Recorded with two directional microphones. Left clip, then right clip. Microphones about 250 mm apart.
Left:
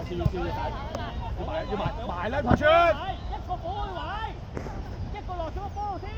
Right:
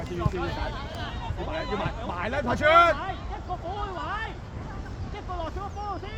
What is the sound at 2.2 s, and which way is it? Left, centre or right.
Speech, right.